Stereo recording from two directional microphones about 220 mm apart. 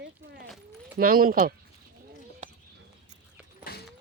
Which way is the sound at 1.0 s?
40° right (ahead or behind).